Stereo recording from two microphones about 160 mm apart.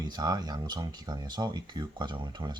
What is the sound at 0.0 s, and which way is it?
Speech, 25° right (ahead or behind).